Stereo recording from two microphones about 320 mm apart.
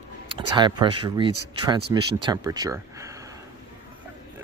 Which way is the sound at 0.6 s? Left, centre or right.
Centre.